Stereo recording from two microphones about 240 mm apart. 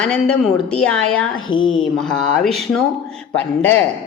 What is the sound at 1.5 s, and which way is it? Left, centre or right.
Speech, centre.